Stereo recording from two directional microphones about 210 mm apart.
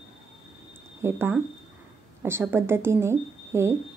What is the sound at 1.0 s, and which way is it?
A woman's voice, 10° right (ahead or behind).